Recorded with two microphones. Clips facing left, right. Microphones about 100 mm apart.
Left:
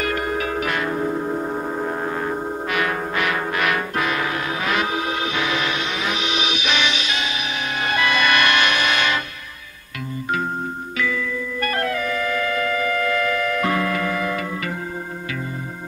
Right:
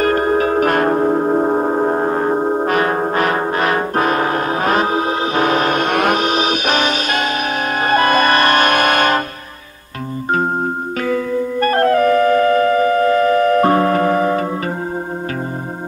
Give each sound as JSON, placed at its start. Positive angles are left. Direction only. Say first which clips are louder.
{"t": 0.0, "sound": "music", "louder": "right 9 dB", "side_deg": -40}
{"t": 11.0, "sound": "music", "louder": "right 6 dB", "side_deg": -45}